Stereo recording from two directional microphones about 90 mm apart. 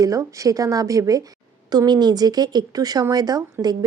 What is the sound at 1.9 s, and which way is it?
A woman's voice, 50° right (ahead or behind).